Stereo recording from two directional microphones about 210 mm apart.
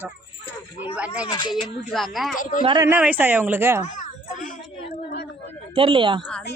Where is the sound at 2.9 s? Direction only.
5° right (ahead or behind).